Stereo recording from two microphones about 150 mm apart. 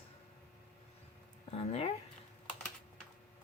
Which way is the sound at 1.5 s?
45° left (ahead or behind).